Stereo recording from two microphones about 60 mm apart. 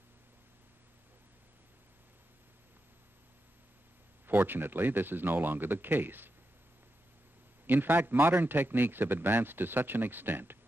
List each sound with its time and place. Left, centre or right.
4.3 s a man's voice: right
7.6 s a man's voice: right